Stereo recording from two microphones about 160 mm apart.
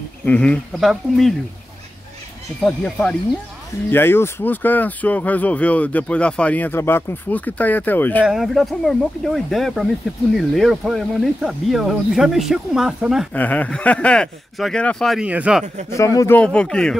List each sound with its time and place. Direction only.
0.2 s speech: 10° left (ahead or behind)
2.6 s speech: 5° left (ahead or behind)
8.3 s speech: centre (ahead or behind)
13.3 s speech: 10° left (ahead or behind); by 15.6 s 10° right (ahead or behind)
15.9 s speech: 20° left (ahead or behind)
16.3 s speech: 5° left (ahead or behind)